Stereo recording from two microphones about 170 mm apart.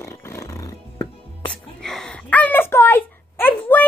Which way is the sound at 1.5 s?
5° left (ahead or behind).